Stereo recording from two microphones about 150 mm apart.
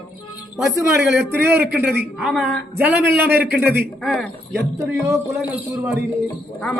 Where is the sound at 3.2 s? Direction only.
90° right.